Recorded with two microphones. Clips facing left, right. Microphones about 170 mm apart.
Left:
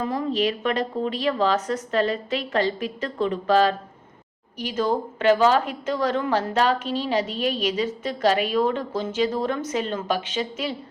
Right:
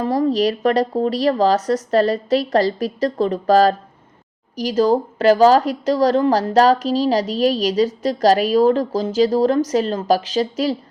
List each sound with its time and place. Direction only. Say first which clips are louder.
0.0 s speech: right 6 dB; 35° right (ahead or behind)